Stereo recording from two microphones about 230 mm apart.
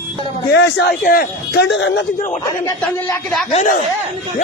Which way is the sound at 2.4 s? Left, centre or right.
Centre.